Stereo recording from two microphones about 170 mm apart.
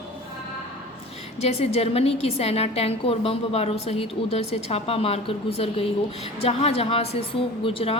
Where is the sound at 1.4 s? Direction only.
40° left (ahead or behind).